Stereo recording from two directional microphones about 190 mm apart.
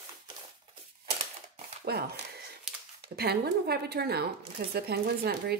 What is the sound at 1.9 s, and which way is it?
Speech, 55° right (ahead or behind).